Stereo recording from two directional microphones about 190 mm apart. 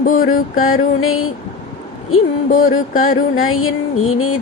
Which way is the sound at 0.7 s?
90° left.